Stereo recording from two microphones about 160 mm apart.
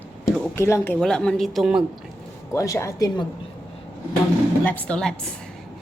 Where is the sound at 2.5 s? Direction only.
20° left (ahead or behind).